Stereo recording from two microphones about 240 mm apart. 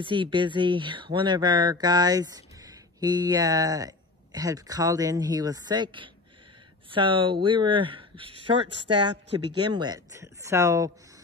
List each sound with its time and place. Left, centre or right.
0.0 s speech: right
9.1 s speech: right
9.6 s speech: centre